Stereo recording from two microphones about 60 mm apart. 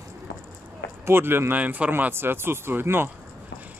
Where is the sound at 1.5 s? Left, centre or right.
Right.